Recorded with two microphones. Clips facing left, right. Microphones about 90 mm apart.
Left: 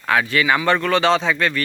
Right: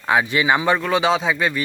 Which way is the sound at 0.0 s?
20° right (ahead or behind).